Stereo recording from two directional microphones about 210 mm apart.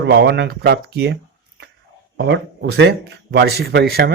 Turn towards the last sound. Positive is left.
turn(degrees=-50)  # may be behind; listen again after turning